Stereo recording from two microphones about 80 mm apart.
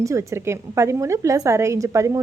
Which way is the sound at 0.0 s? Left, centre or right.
Right.